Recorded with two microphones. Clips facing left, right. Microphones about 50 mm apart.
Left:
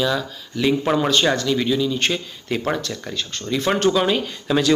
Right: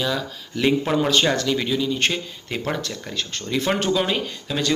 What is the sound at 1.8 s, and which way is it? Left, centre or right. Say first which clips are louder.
Speech: left 1 dB; right.